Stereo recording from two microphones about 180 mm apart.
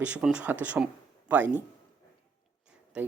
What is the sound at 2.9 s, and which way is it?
Speech, 5° right (ahead or behind).